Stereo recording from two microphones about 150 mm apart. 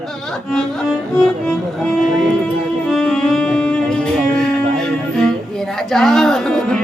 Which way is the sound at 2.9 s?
5° left (ahead or behind).